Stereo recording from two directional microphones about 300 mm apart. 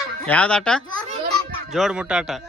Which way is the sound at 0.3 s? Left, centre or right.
Centre.